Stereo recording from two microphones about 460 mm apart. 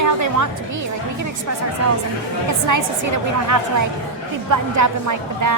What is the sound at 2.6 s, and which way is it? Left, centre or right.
A woman's voice, right.